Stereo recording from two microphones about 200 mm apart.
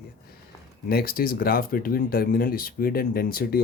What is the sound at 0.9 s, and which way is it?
Speech, 50° left (ahead or behind).